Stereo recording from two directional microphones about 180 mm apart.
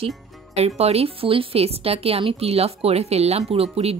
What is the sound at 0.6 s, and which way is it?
A woman's voice, 35° right (ahead or behind).